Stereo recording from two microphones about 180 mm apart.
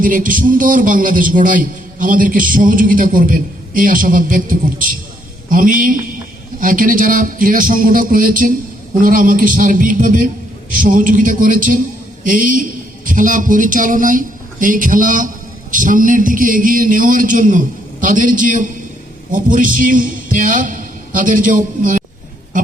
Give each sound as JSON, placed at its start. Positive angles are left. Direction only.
{"t": 0.0, "sound": "a man's voice", "side_deg": -50}